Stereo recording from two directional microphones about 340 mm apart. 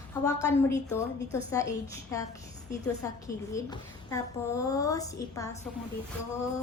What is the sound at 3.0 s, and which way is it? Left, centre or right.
A woman's voice, centre.